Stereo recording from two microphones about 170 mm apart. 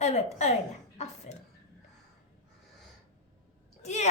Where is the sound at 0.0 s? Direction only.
40° left (ahead or behind).